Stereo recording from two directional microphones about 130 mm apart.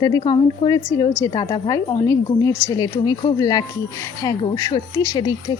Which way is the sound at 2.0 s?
20° left (ahead or behind).